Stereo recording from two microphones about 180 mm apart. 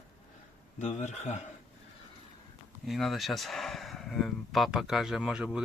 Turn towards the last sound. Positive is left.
turn(degrees=-5)  # may be behind; listen again after turning